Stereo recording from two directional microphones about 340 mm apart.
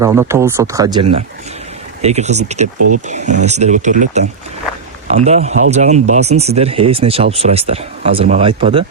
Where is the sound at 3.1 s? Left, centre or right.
Right.